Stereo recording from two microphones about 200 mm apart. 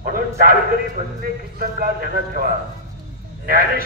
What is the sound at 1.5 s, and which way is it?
A man's voice, 45° right (ahead or behind).